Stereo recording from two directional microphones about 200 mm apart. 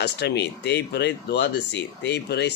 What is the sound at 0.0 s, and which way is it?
Speech, 55° left (ahead or behind).